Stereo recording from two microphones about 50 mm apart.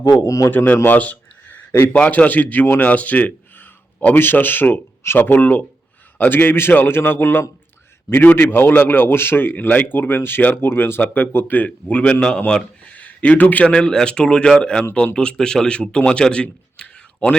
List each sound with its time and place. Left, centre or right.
0.2 s a man's voice: left
0.5 s a man's voice: left
0.9 s a sound: left
1.9 s a man's voice: left
11.0 s a man's voice: left
11.5 s speech: left
13.7 s a man's voice: centre